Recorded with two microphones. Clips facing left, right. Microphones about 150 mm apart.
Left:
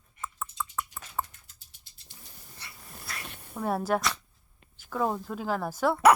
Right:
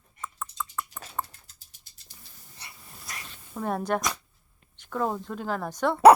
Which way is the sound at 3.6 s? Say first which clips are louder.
Even; 5° left (ahead or behind).